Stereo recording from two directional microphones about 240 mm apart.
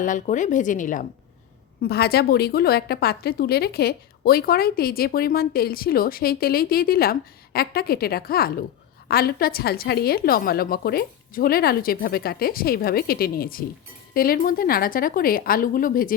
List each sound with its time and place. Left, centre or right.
0.0 s a woman's voice: left